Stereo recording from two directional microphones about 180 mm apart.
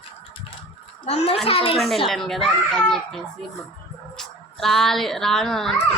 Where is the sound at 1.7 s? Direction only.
Centre (ahead or behind).